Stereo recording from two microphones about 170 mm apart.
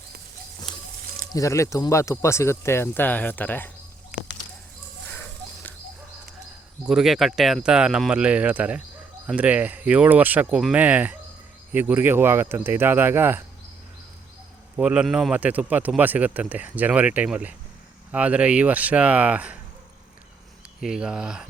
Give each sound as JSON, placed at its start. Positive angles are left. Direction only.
{"t": 1.3, "sound": "speech", "side_deg": 20}
{"t": 6.8, "sound": "speech", "side_deg": -5}
{"t": 14.8, "sound": "speech", "side_deg": -5}
{"t": 20.8, "sound": "speech", "side_deg": -5}